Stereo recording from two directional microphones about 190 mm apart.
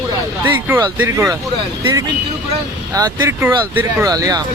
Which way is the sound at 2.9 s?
20° right (ahead or behind).